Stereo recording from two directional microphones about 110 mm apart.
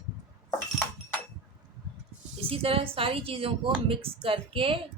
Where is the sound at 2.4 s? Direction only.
60° right (ahead or behind).